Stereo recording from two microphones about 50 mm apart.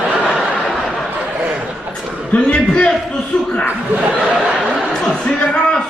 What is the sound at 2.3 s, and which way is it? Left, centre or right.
Speech, centre.